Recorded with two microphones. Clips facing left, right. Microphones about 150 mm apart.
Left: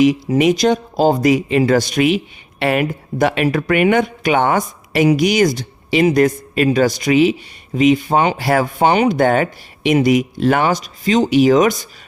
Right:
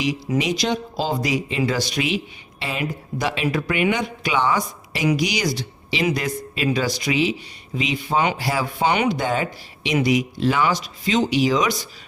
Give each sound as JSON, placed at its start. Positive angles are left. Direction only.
{"t": 0.3, "sound": "speech", "side_deg": 50}
{"t": 8.4, "sound": "speech", "side_deg": 55}